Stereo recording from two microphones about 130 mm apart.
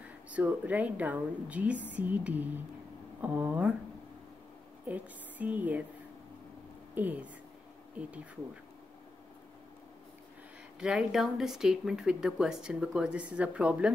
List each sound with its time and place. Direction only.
0.0 s speech: 10° right (ahead or behind)
4.8 s speech: 10° right (ahead or behind)
7.0 s speech: 10° right (ahead or behind)
10.8 s speech: 5° right (ahead or behind)